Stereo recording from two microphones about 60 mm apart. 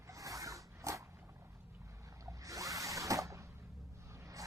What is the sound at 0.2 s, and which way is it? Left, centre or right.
Dog, right.